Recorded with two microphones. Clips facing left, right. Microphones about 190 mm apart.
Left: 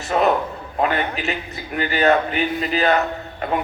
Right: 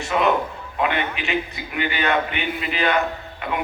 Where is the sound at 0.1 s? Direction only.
40° left (ahead or behind).